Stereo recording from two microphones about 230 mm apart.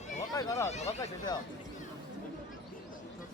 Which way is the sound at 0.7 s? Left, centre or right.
Left.